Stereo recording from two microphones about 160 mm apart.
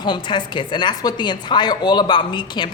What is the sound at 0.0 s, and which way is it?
A man's voice, 30° left (ahead or behind).